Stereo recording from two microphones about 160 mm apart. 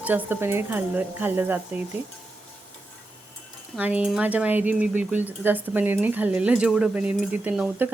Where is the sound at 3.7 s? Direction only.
10° right (ahead or behind).